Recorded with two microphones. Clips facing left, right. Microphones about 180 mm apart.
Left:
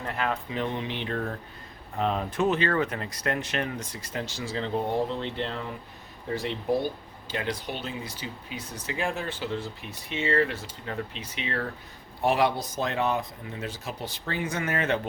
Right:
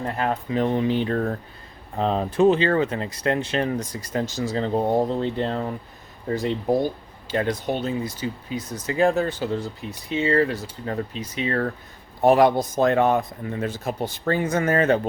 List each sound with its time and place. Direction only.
0.0 s speech: 35° right (ahead or behind)